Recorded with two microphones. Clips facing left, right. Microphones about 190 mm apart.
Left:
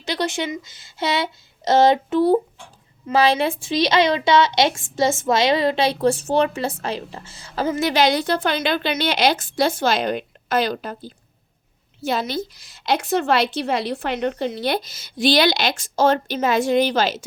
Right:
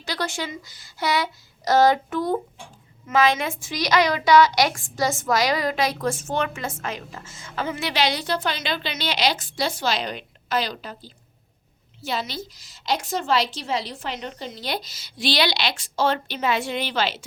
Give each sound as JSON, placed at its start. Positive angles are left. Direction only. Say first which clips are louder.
{"t": 0.0, "sound": "a woman's voice", "louder": "left 5 dB", "side_deg": 20}